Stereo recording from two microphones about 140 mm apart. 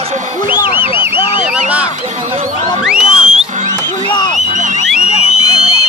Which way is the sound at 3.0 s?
40° left (ahead or behind).